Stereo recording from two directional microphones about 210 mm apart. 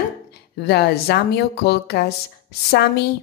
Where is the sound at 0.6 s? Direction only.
50° left (ahead or behind).